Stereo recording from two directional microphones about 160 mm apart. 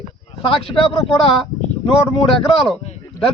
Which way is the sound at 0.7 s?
35° left (ahead or behind).